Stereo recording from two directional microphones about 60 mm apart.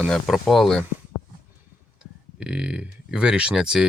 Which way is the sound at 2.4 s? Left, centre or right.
Centre.